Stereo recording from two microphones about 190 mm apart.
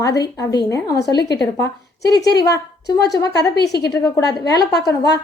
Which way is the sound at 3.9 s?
20° left (ahead or behind).